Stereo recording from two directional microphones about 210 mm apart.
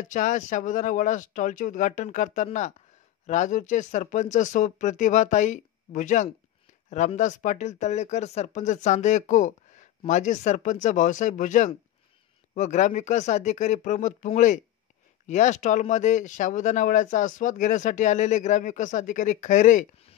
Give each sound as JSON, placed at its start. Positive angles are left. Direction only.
{"t": 0.0, "sound": "speech", "side_deg": 35}